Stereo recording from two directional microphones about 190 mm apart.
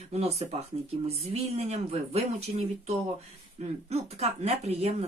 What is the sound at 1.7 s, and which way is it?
Speech, 35° right (ahead or behind).